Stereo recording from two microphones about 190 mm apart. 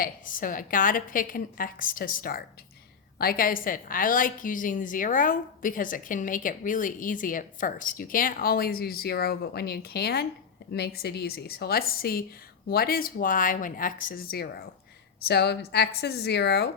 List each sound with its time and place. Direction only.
0.0 s a woman's voice: 45° left (ahead or behind); by 16.6 s 60° left (ahead or behind)